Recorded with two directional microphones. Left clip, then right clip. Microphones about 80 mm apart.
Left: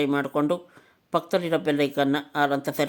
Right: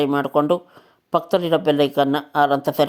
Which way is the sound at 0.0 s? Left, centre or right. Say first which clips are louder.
Right 5 dB; right.